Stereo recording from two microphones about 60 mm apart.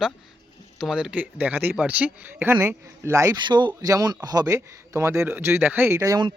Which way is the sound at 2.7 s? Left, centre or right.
Right.